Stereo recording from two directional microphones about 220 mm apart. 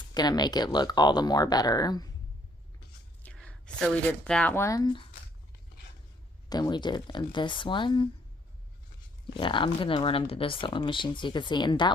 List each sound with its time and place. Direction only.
0.1 s speech: 20° left (ahead or behind)
3.2 s speech: 5° left (ahead or behind)
6.5 s speech: 20° left (ahead or behind)
9.3 s speech: 20° left (ahead or behind)